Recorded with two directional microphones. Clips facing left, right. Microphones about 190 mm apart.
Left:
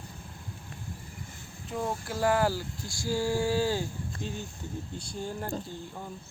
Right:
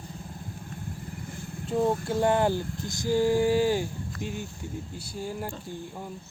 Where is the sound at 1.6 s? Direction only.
30° right (ahead or behind); by 5.5 s 10° right (ahead or behind).